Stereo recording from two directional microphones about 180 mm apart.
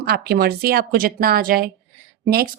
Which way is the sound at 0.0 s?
60° right (ahead or behind).